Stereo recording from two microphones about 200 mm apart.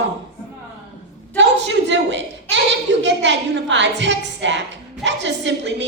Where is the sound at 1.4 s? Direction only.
65° right (ahead or behind).